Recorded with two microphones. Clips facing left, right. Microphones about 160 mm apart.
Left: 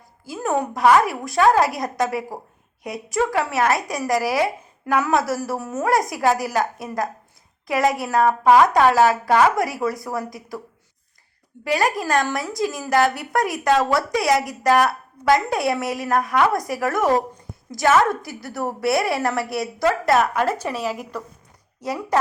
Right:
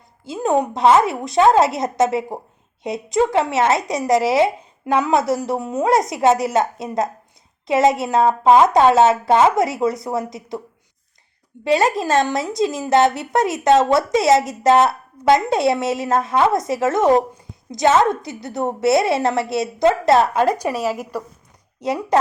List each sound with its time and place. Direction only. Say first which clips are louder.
0.3 s a woman's voice: right 4 dB; 20° right (ahead or behind)
11.6 s a woman's voice: right 4 dB; 25° right (ahead or behind)
20.7 s speech: right 4 dB; 45° right (ahead or behind)
21.8 s speech: right 4 dB; 20° right (ahead or behind)